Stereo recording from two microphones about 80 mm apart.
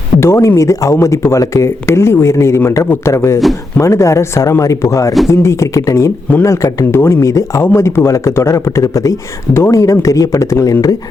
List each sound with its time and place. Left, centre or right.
0.2 s speech: left